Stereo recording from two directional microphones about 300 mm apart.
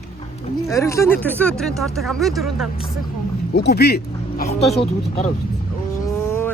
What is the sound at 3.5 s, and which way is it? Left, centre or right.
Speech, left.